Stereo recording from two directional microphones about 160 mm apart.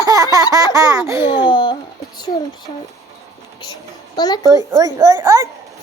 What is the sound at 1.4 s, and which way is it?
Speech, 30° left (ahead or behind).